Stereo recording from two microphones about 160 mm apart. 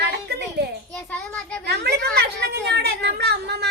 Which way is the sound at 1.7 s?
90° right.